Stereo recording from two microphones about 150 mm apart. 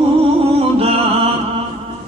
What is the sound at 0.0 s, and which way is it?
Music, 40° right (ahead or behind).